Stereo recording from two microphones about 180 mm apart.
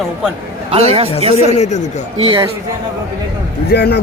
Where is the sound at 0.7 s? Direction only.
35° right (ahead or behind).